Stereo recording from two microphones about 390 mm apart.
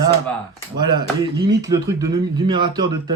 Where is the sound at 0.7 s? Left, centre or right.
Centre.